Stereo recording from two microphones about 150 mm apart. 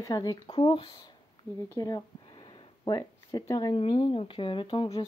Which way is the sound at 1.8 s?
20° left (ahead or behind).